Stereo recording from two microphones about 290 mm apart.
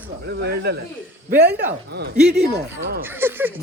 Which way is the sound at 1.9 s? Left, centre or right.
Right.